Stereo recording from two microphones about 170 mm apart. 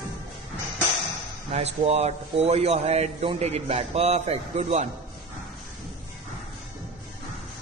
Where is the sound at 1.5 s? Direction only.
40° right (ahead or behind).